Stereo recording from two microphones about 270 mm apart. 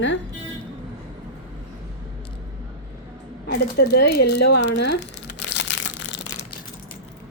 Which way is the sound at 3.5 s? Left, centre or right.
Left.